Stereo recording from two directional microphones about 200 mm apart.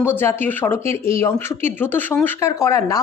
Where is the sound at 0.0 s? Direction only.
10° left (ahead or behind).